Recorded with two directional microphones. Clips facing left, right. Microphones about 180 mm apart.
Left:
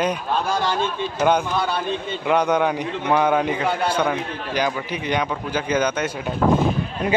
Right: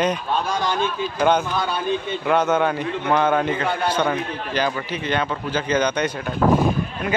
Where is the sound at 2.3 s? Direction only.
15° left (ahead or behind).